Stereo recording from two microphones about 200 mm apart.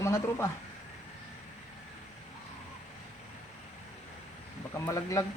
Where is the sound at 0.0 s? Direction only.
15° left (ahead or behind).